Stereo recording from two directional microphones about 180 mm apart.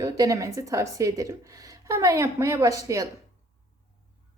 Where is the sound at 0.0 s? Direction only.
20° right (ahead or behind).